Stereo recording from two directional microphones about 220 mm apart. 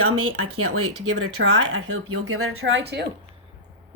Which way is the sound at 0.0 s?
80° right.